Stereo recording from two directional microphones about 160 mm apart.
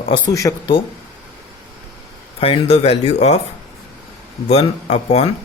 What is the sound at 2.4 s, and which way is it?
Speech, 35° left (ahead or behind).